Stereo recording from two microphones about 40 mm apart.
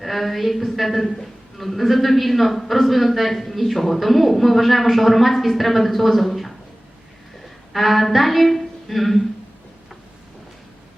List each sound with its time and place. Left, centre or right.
0.0 s a woman's voice: centre
7.7 s a woman's voice: centre